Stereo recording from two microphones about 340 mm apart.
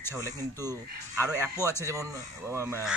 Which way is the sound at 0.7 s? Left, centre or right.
Centre.